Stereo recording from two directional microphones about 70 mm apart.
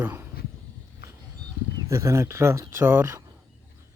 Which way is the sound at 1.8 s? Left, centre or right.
Right.